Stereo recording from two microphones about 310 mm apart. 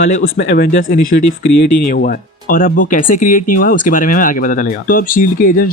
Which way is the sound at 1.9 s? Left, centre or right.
Left.